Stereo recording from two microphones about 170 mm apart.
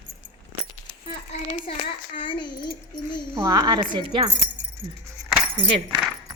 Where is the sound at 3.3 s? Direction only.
20° right (ahead or behind).